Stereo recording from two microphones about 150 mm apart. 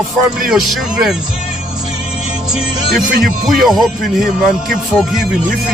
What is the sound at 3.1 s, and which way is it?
Speech, 70° right (ahead or behind).